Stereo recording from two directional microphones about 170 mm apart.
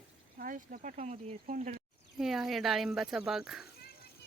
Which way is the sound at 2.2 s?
Centre (ahead or behind).